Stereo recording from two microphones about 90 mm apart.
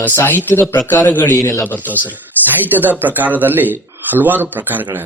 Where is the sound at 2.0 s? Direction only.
20° right (ahead or behind).